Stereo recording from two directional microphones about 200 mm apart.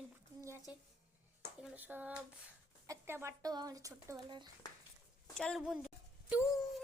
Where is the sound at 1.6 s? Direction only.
10° right (ahead or behind).